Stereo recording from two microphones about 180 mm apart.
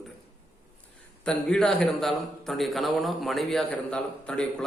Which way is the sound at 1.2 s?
5° left (ahead or behind).